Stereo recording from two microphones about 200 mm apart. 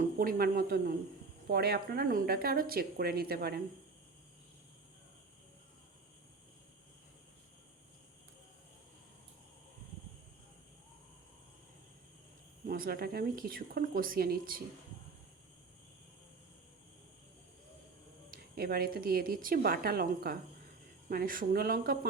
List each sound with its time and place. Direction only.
0.0 s speech: 45° right (ahead or behind)
12.6 s speech: 45° right (ahead or behind)
18.3 s speech: 50° right (ahead or behind)